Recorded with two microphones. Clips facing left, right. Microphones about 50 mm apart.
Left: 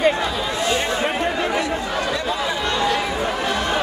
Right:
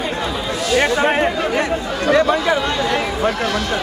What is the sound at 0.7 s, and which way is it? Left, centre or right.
Chatter, right.